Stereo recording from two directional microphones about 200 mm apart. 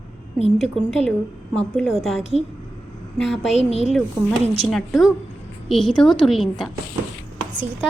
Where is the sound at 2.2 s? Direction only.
30° left (ahead or behind).